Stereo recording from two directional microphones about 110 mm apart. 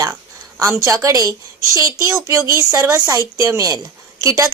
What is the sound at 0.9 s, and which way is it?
A woman's voice, 30° right (ahead or behind).